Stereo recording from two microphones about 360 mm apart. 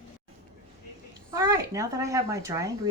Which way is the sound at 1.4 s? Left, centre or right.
Centre.